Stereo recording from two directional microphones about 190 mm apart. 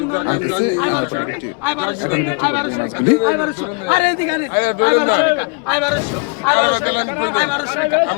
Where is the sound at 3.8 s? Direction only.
40° right (ahead or behind).